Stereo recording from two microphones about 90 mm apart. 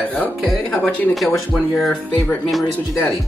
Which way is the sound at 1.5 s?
Centre (ahead or behind).